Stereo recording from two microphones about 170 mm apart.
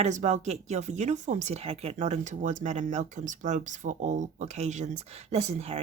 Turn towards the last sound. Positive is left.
turn(degrees=-40)  # may be behind; listen again after turning